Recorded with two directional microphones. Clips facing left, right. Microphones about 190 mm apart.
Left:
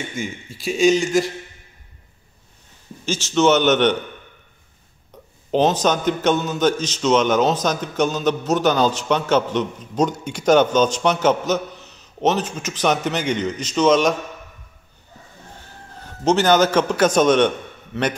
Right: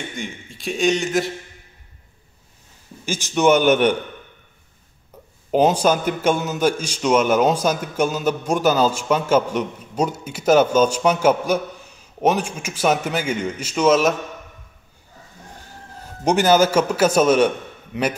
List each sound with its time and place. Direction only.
0.1 s a man's voice: 5° left (ahead or behind)
3.1 s a man's voice: 15° right (ahead or behind)
5.1 s a sound: 5° right (ahead or behind)
5.5 s a man's voice: 10° right (ahead or behind)
16.3 s a man's voice: 10° right (ahead or behind)